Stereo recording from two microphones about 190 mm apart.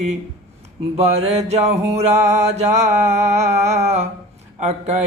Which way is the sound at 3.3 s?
35° right (ahead or behind).